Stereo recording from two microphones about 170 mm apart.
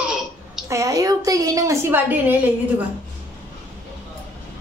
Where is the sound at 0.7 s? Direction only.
20° right (ahead or behind).